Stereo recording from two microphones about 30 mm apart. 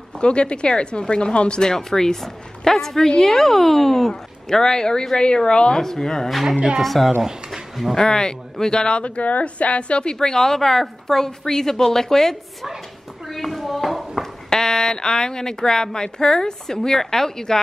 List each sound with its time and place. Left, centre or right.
0.2 s speech: left
1.6 s a woman's voice: centre
4.1 s speech: left
6.8 s speech: centre
7.1 s speech: centre
7.9 s speech: left
9.0 s a woman's voice: left
10.2 s a woman's voice: centre
13.3 s a sound: centre
14.2 s speech: centre